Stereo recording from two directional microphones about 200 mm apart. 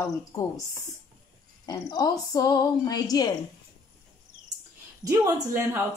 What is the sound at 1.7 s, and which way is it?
Speech, 20° left (ahead or behind).